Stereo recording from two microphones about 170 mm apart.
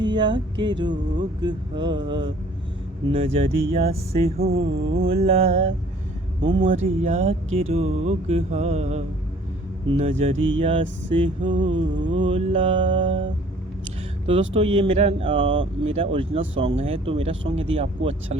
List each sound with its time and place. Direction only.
0.0 s speech: 25° right (ahead or behind)
14.3 s speech: 35° right (ahead or behind)